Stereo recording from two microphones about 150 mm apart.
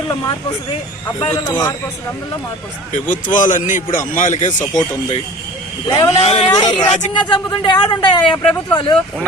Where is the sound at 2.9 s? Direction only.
60° left (ahead or behind).